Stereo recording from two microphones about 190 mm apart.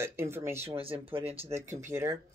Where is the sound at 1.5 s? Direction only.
15° right (ahead or behind).